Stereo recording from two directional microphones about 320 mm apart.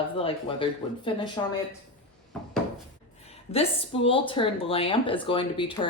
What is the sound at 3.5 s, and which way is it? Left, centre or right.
Speech, centre.